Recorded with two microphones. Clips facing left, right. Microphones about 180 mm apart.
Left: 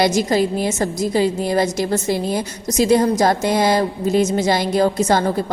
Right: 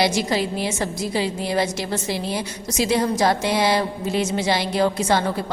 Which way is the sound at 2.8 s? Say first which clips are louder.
Left 5 dB; 45° left (ahead or behind).